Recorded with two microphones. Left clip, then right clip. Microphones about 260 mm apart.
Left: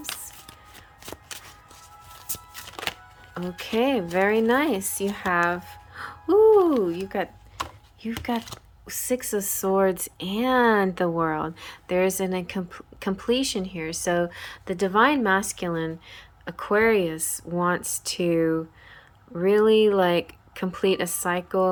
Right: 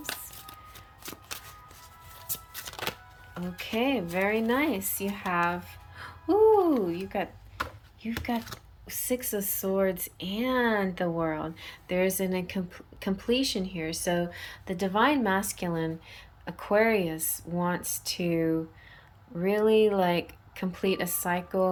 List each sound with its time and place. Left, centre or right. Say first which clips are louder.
3.6 s speech: left 5 dB; centre
19.4 s speech: left 5 dB; centre